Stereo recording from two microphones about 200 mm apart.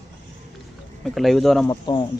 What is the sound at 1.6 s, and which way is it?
Speech, 20° left (ahead or behind).